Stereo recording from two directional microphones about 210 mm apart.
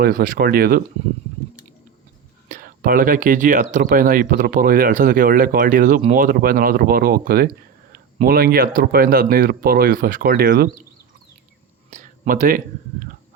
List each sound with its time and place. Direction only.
0.0 s speech: 40° right (ahead or behind)
2.5 s speech: 40° right (ahead or behind)
11.9 s speech: 35° right (ahead or behind)